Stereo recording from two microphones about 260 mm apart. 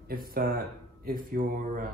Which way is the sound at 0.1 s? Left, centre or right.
Right.